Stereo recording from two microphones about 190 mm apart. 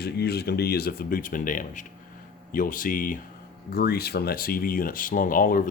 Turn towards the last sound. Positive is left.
turn(degrees=45)  # may be behind; listen again after turning